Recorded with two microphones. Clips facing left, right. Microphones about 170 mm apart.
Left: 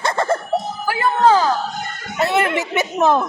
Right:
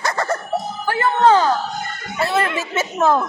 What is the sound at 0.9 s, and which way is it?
Laughter, 10° left (ahead or behind).